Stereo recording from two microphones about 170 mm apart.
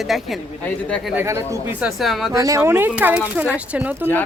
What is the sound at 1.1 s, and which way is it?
Speech, 15° right (ahead or behind).